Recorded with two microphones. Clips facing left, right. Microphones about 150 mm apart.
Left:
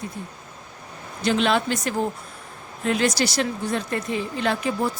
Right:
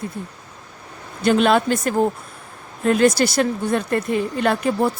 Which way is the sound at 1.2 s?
50° right (ahead or behind).